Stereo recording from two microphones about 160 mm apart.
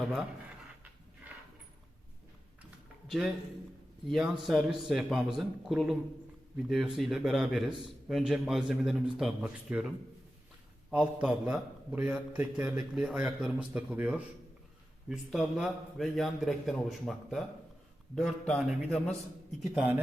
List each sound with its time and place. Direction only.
0.0 s a man's voice: centre (ahead or behind)
4.1 s a man's voice: centre (ahead or behind)
10.9 s a man's voice: 5° right (ahead or behind)